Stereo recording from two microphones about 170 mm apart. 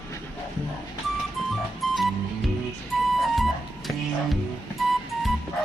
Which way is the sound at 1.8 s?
Centre (ahead or behind).